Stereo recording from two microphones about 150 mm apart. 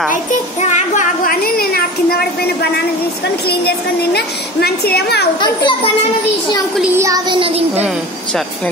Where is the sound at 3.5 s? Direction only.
90° left.